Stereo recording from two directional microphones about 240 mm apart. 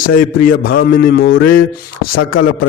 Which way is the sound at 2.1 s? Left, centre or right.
Left.